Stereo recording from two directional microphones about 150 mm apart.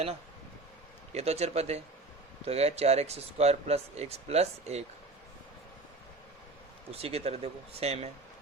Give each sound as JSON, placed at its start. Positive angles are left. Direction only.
{"t": 1.1, "sound": "speech", "side_deg": -45}
{"t": 6.9, "sound": "speech", "side_deg": -40}